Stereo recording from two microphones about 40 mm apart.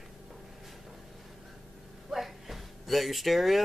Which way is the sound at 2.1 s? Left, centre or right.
Centre.